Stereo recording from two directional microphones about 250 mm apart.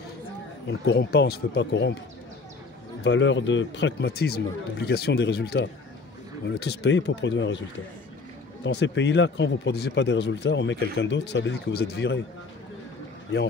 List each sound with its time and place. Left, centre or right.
0.7 s speech: left
3.0 s speech: left
8.6 s speech: left